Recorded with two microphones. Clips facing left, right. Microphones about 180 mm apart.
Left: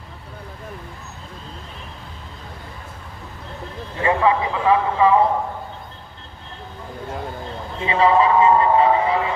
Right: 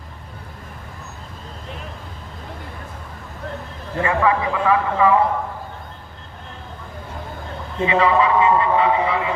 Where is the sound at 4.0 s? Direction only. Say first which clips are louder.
Left 1 dB; 25° left (ahead or behind).